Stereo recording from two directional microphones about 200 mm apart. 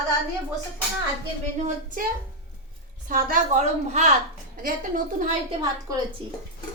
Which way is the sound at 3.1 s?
40° right (ahead or behind).